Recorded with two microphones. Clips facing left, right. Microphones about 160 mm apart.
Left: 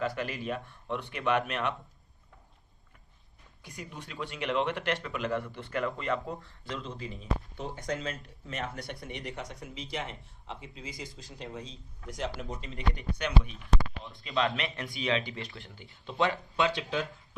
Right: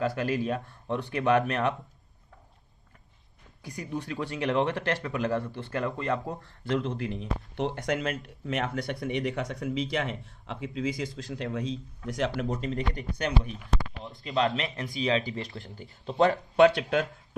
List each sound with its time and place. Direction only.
0.0 s speech: 35° right (ahead or behind)
3.7 s speech: 35° right (ahead or behind)
6.4 s speech: 60° right (ahead or behind)